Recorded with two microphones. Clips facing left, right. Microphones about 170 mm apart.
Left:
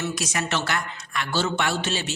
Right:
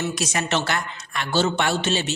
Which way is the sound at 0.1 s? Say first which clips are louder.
Right 3 dB; 25° right (ahead or behind).